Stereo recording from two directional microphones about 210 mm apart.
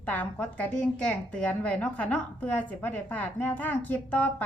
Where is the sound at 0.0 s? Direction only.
5° left (ahead or behind).